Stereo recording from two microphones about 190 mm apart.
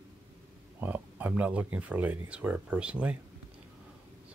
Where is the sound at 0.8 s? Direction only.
10° right (ahead or behind).